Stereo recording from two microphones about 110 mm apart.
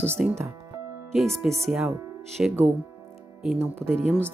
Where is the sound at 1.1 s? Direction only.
Centre (ahead or behind).